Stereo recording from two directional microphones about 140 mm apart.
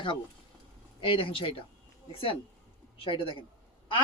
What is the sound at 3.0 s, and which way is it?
Speech, 40° left (ahead or behind).